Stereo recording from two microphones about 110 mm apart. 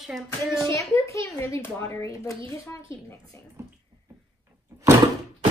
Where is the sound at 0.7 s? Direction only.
30° left (ahead or behind).